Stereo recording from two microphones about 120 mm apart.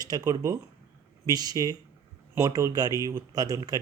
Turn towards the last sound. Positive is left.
turn(degrees=-30)  # may be behind; listen again after turning